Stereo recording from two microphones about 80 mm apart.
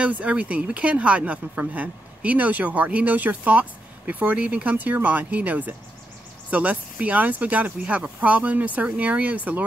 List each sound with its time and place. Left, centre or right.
0.0 s a woman's voice: centre